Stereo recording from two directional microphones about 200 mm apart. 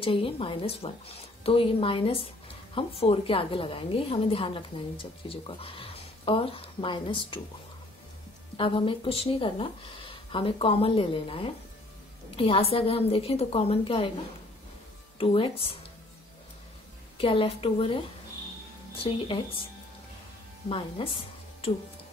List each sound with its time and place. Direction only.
0.0 s a woman's voice: 25° left (ahead or behind)
8.5 s a woman's voice: 25° left (ahead or behind)
15.1 s a woman's voice: 25° left (ahead or behind)
17.2 s a woman's voice: 25° left (ahead or behind)
20.6 s a woman's voice: 30° left (ahead or behind)